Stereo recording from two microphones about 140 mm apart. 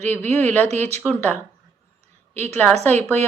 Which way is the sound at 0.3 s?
15° left (ahead or behind).